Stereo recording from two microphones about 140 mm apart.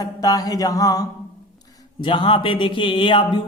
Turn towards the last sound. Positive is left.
turn(degrees=35)  # may be behind; listen again after turning